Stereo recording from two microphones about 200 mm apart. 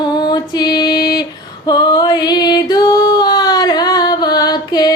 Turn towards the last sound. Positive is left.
turn(degrees=20)  # may be behind; listen again after turning